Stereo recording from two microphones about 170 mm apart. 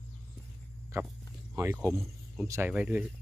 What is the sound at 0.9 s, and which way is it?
Speech, 20° right (ahead or behind).